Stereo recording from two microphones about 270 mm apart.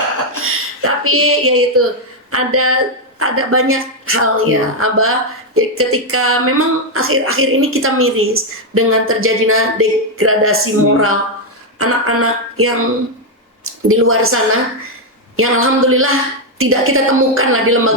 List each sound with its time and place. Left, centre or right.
0.4 s speech: right